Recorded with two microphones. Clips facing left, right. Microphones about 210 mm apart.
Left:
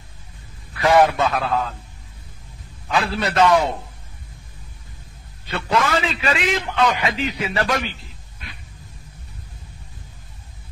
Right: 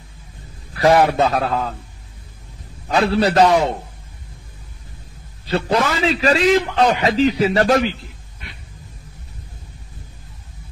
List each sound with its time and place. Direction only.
0.7 s a man's voice: 35° right (ahead or behind)
2.9 s a man's voice: 35° right (ahead or behind)
5.5 s a man's voice: 35° right (ahead or behind)